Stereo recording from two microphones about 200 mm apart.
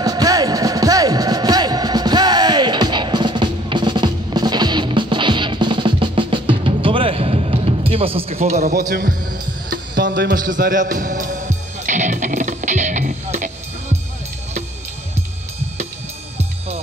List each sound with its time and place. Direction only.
0.0 s music: 20° right (ahead or behind)
8.6 s speech: 45° right (ahead or behind)
9.7 s music: 55° right (ahead or behind)
10.3 s music: 45° right (ahead or behind)